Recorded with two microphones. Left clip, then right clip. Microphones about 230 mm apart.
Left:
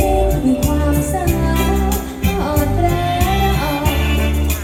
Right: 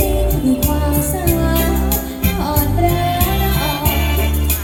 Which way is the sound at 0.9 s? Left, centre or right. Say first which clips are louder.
Even; right.